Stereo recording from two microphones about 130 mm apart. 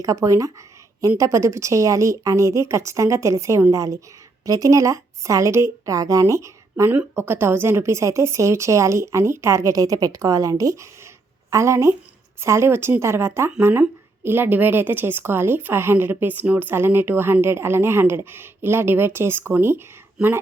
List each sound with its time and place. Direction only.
0.0 s a woman's voice: 25° right (ahead or behind)